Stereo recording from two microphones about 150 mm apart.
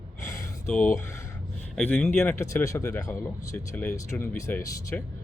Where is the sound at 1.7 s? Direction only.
10° left (ahead or behind).